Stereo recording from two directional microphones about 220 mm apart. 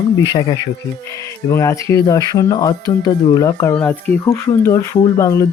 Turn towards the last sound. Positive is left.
turn(degrees=15)  # may be behind; listen again after turning